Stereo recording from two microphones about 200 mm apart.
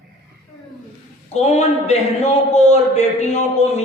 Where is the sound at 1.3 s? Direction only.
35° left (ahead or behind).